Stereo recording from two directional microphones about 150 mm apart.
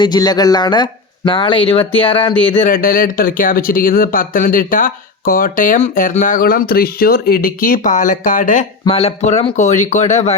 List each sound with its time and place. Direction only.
0.0 s speech: 25° left (ahead or behind)
2.6 s speech: 70° left (ahead or behind)
8.9 s speech: 45° left (ahead or behind)